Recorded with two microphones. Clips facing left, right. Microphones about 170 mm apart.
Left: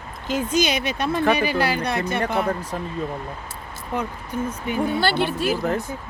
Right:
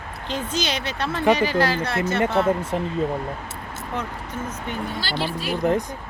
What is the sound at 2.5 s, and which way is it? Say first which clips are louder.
Speech: right 4 dB; 25° right (ahead or behind).